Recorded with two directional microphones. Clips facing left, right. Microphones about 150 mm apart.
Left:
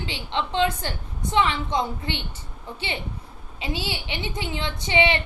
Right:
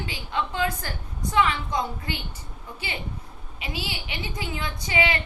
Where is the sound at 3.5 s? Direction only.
30° left (ahead or behind).